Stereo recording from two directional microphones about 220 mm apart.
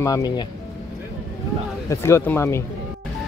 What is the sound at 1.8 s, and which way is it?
Speech, 10° left (ahead or behind).